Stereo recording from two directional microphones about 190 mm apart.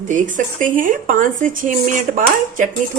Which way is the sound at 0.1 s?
40° right (ahead or behind).